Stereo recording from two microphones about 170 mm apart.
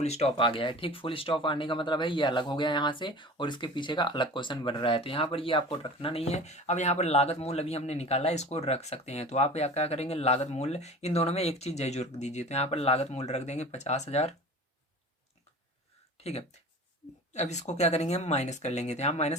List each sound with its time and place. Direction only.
0.0 s speech: 40° left (ahead or behind)
17.3 s speech: 40° left (ahead or behind)